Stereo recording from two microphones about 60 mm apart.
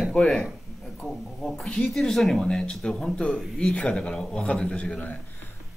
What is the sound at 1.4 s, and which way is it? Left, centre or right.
Speech, centre.